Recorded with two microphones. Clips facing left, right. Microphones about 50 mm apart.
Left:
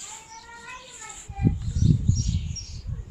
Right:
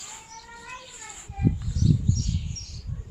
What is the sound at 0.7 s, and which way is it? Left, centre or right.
Children playing, right.